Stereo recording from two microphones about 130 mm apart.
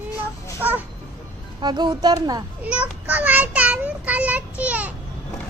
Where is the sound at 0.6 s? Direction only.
15° right (ahead or behind).